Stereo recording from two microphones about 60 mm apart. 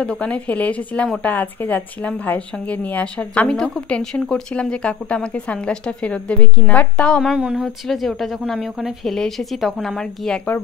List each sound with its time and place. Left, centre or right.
0.0 s a woman's voice: centre
3.4 s a woman's voice: centre
7.3 s speech: centre
7.8 s speech: centre